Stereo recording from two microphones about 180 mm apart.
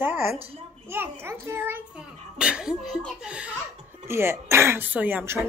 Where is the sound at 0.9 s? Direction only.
15° right (ahead or behind).